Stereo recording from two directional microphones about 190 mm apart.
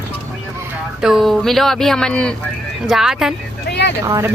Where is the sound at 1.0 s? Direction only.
Centre (ahead or behind).